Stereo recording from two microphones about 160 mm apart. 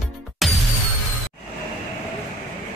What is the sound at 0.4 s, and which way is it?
Music, centre (ahead or behind).